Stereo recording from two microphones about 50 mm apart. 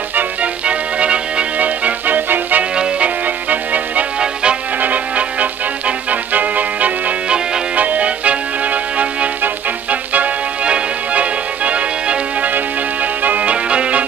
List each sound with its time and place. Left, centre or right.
0.1 s music: right
2.7 s music: centre
3.4 s music: right
4.2 s music: centre
4.7 s music: right